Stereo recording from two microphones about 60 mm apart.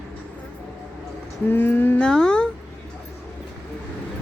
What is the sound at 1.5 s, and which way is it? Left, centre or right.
Speech, left.